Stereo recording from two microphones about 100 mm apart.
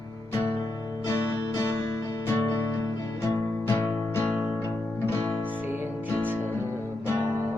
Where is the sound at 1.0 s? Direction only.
30° left (ahead or behind).